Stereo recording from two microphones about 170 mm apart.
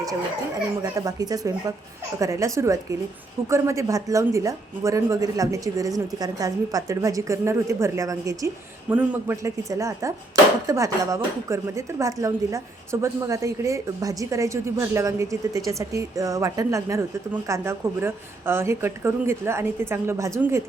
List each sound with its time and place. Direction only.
0.8 s a woman's voice: 20° right (ahead or behind)